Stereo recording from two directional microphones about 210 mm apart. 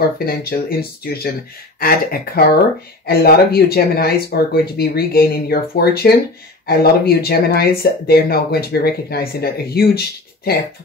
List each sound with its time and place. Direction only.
0.2 s speech: 45° left (ahead or behind)